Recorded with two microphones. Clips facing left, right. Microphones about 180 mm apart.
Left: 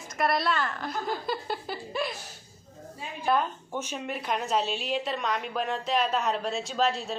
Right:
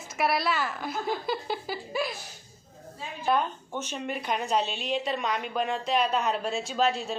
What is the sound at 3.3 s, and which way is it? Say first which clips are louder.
A woman's voice: even; 5° left (ahead or behind).